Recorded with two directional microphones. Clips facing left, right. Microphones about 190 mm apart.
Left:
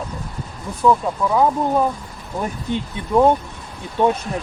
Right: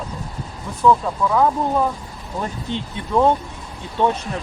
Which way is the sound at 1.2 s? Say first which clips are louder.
Left 1 dB; 20° left (ahead or behind).